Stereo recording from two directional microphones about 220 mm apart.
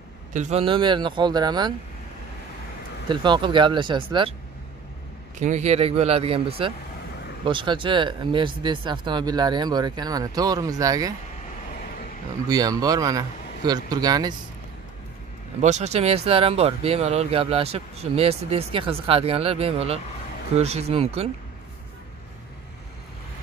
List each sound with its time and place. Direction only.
0.3 s speech: 30° right (ahead or behind)
3.1 s speech: 20° right (ahead or behind)
5.4 s speech: 30° right (ahead or behind); by 11.1 s 15° right (ahead or behind)
12.4 s speech: 15° right (ahead or behind)
15.6 s speech: 30° right (ahead or behind)